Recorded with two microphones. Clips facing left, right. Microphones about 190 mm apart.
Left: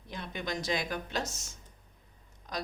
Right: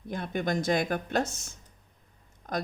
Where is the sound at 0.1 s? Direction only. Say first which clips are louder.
Right 7 dB; 50° right (ahead or behind).